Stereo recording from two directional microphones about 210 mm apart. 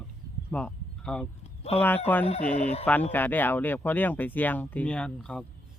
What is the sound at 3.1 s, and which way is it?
Speech, 10° left (ahead or behind).